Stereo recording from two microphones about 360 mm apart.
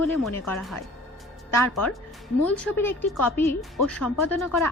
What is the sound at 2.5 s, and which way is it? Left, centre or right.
A woman's voice, centre.